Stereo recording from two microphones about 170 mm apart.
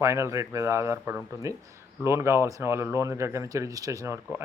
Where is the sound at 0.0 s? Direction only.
15° right (ahead or behind).